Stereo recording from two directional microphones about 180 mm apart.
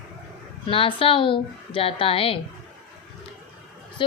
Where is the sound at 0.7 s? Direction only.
30° left (ahead or behind).